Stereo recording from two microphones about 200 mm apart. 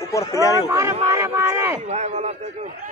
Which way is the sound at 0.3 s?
15° left (ahead or behind).